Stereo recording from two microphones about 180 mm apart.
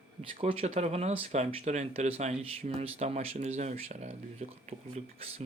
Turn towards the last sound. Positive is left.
turn(degrees=-35)  # may be behind; listen again after turning